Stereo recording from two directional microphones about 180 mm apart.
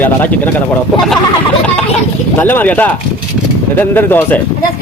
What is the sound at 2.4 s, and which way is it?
Speech, 10° left (ahead or behind).